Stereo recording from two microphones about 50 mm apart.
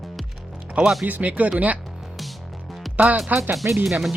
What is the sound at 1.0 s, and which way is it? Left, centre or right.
Speech, right.